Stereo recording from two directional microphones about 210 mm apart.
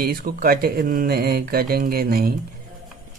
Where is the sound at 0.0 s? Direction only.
45° right (ahead or behind).